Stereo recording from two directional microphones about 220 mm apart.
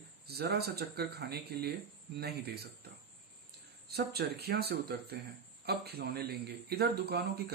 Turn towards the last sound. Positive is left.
turn(degrees=-45)  # may be behind; listen again after turning